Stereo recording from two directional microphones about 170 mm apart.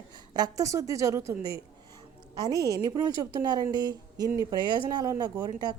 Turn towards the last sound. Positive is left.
turn(degrees=-25)  # may be behind; listen again after turning